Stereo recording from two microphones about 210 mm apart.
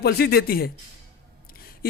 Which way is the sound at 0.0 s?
50° left (ahead or behind).